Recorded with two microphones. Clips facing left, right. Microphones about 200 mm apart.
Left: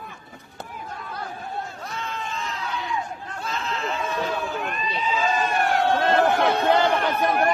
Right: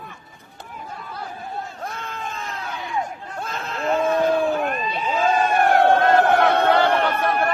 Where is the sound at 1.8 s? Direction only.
50° right (ahead or behind).